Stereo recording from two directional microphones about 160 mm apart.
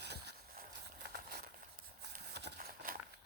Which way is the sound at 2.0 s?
90° right.